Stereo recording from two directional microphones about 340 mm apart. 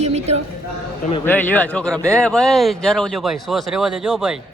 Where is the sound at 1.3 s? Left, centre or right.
Centre.